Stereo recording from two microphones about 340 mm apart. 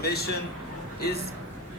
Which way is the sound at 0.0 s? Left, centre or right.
Left.